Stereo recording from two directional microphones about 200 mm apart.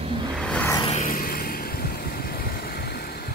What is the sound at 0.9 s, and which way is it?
Vehicle, 40° left (ahead or behind).